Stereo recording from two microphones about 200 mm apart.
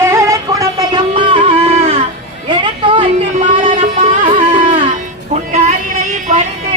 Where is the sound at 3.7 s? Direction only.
25° right (ahead or behind).